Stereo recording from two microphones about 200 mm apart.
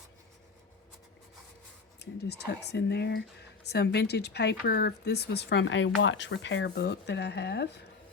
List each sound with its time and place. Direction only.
2.0 s speech: 55° left (ahead or behind)